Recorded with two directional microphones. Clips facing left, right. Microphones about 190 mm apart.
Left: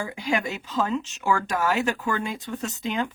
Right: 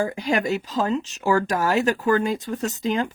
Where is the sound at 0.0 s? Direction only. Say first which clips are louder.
Right 4 dB; 40° right (ahead or behind).